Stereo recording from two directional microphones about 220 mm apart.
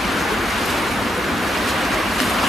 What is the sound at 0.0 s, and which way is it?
Waves, centre (ahead or behind).